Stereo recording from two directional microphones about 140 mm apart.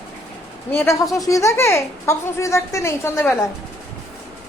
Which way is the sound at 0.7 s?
20° left (ahead or behind).